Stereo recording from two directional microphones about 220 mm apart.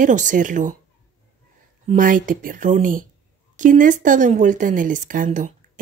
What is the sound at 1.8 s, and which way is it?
Speech, 35° right (ahead or behind).